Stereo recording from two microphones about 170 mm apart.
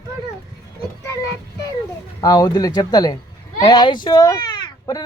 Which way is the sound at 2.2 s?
20° left (ahead or behind).